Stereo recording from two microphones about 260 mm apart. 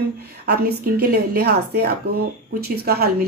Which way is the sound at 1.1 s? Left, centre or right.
Right.